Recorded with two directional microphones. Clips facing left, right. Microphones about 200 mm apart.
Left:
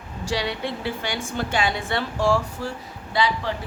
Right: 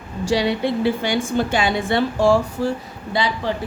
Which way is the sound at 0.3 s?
15° right (ahead or behind).